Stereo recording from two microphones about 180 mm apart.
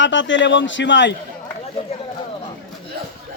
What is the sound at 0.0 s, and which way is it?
A man's voice, 90° left.